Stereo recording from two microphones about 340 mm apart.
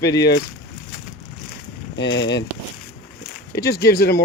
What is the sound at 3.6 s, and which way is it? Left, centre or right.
Speech, left.